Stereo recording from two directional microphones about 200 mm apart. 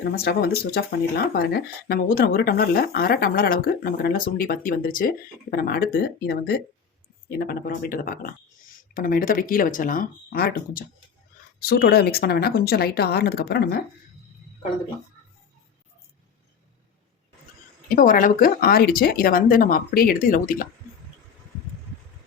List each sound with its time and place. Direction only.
0.0 s speech: 50° left (ahead or behind)
17.8 s speech: 45° left (ahead or behind)